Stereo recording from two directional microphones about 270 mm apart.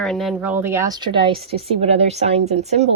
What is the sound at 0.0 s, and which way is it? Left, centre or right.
A woman's voice, centre.